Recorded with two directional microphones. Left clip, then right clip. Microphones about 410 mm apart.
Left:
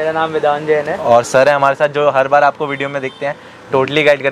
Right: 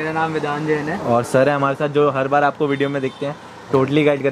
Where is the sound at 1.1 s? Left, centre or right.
Left.